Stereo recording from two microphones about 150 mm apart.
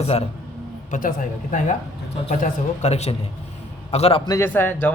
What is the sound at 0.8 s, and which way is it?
Speech, 60° left (ahead or behind).